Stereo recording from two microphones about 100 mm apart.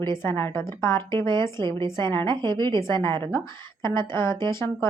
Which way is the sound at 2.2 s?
50° right (ahead or behind).